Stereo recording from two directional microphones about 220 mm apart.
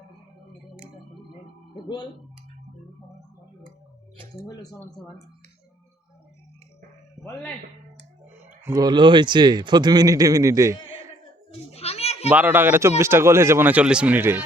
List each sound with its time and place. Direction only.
1.7 s speech: 20° left (ahead or behind)
4.4 s speech: 15° left (ahead or behind)
8.6 s a man's voice: 15° right (ahead or behind)
11.7 s children playing: 30° left (ahead or behind)
12.3 s a man's voice: 5° right (ahead or behind)